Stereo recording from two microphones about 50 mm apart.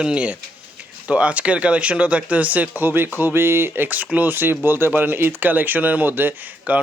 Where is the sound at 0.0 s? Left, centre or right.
Right.